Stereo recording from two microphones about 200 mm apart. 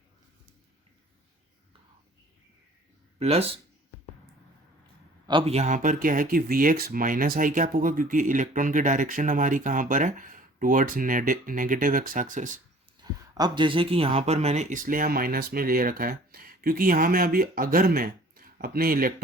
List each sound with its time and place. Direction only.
3.2 s speech: 30° right (ahead or behind)
5.2 s speech: 25° right (ahead or behind)
13.0 s speech: 20° right (ahead or behind); by 19.1 s 45° right (ahead or behind)